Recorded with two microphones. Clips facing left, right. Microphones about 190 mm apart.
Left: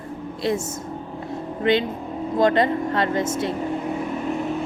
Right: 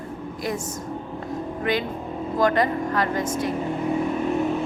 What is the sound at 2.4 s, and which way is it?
A woman's voice, 25° left (ahead or behind).